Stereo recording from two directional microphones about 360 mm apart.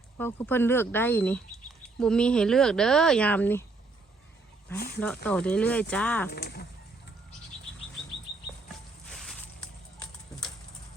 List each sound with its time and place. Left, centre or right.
0.2 s speech: centre
4.9 s speech: centre
6.3 s speech: left
9.0 s a sound: centre